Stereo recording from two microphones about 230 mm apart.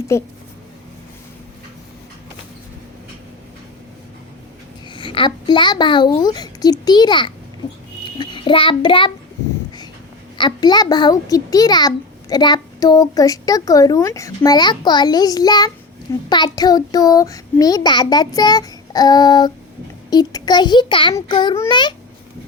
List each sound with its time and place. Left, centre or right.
0.1 s a child's voice: centre
4.9 s a child's voice: left
10.3 s a child's voice: centre